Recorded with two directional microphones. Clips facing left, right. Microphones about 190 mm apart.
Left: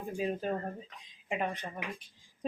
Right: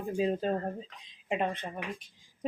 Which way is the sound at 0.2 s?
25° right (ahead or behind).